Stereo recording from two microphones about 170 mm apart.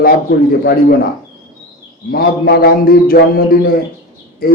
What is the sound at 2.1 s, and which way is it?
A man's voice, 70° left (ahead or behind).